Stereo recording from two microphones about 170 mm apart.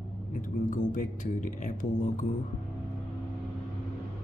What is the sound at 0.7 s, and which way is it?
Speech, 50° left (ahead or behind).